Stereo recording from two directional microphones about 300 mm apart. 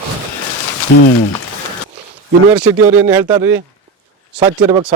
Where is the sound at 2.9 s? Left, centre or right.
Centre.